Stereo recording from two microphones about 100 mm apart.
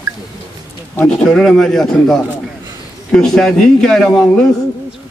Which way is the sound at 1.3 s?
5° left (ahead or behind).